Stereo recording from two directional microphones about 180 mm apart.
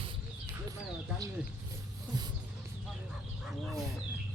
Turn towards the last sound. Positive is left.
turn(degrees=-5)  # may be behind; listen again after turning